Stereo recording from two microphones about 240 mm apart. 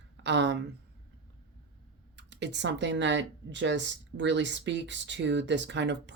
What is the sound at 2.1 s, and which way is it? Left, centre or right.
Speech, right.